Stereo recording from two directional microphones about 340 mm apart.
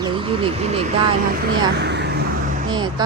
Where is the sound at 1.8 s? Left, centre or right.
Right.